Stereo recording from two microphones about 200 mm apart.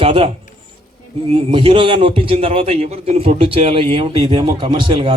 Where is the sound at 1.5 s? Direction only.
25° right (ahead or behind).